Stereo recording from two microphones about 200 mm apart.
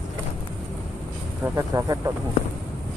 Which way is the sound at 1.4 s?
15° right (ahead or behind).